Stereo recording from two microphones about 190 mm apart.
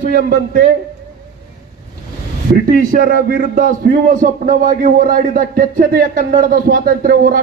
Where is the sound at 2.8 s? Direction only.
45° right (ahead or behind).